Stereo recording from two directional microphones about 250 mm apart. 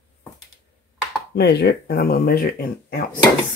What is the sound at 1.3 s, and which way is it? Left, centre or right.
Speech, left.